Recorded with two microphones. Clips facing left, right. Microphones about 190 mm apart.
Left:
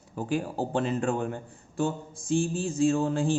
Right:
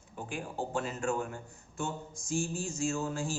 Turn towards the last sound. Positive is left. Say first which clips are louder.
# left 9 dB
turn(degrees=30)  # may be behind; listen again after turning